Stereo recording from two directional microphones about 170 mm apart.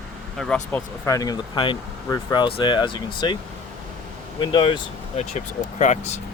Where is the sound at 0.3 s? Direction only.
5° left (ahead or behind); by 3.3 s 25° left (ahead or behind).